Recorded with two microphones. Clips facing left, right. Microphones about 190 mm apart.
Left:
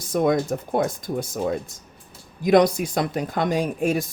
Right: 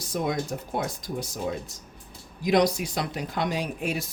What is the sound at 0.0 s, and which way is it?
Speech, 50° left (ahead or behind).